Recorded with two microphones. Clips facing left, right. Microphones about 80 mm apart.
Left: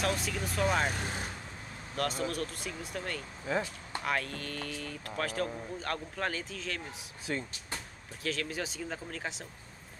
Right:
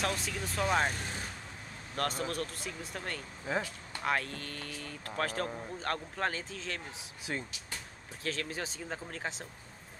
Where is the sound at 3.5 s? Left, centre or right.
Centre.